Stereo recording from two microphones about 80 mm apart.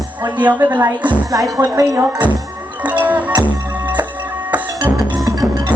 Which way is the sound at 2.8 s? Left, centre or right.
Centre.